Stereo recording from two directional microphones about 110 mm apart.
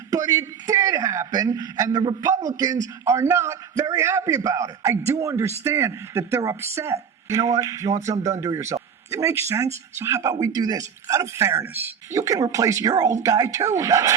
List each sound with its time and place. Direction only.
0.1 s a man's voice: 35° right (ahead or behind)
10.3 s speech: 35° right (ahead or behind); by 11.9 s 20° right (ahead or behind)
12.1 s speech: 30° right (ahead or behind)